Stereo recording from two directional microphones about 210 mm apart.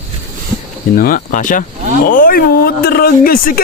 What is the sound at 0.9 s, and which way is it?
Speech, 40° left (ahead or behind).